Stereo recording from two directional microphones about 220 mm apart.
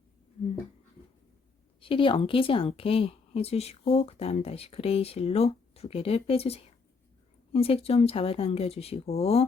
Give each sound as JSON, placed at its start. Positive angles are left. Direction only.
{"t": 1.8, "sound": "speech", "side_deg": 25}